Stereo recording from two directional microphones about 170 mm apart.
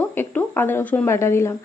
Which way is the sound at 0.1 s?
10° left (ahead or behind).